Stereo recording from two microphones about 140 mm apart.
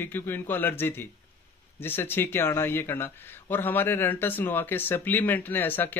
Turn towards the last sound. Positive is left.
turn(degrees=15)  # may be behind; listen again after turning